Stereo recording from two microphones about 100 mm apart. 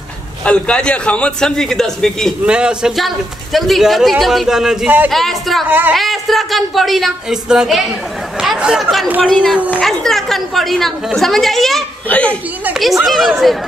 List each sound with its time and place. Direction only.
0.5 s a man's voice: 10° left (ahead or behind)
2.4 s a man's voice: 10° right (ahead or behind)
4.8 s speech: 15° right (ahead or behind)
5.1 s a man's voice: centre (ahead or behind)
5.7 s speech: 20° right (ahead or behind)
5.9 s a man's voice: centre (ahead or behind)
8.4 s chatter: 5° right (ahead or behind)
9.2 s a man's voice: centre (ahead or behind)
12.1 s a man's voice: 10° left (ahead or behind)
13.0 s a man's voice: centre (ahead or behind)